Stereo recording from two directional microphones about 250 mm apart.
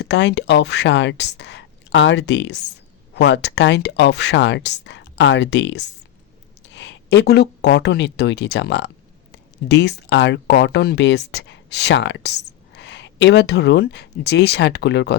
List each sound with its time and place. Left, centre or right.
0.0 s speech: left